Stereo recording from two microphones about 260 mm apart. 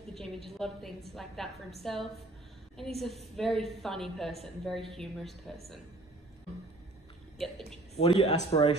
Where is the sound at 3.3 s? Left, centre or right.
Centre.